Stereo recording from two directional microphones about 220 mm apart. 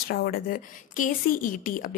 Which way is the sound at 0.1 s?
45° left (ahead or behind).